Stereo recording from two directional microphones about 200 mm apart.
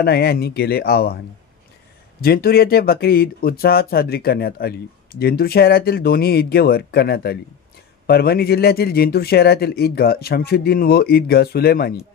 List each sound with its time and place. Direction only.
0.0 s speech: 55° left (ahead or behind)
2.2 s speech: 50° left (ahead or behind)